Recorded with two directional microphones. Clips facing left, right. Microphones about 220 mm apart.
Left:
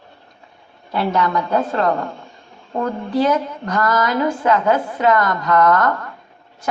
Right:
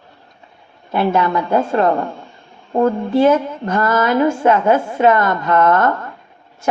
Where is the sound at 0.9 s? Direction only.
25° right (ahead or behind).